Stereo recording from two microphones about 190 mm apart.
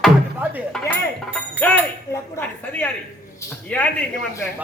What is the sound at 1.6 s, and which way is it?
Speech, 10° left (ahead or behind).